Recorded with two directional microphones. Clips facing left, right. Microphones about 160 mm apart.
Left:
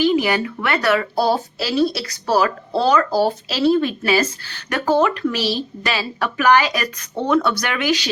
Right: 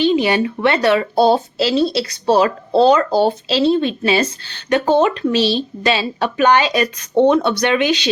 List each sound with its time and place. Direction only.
0.0 s speech: 25° right (ahead or behind)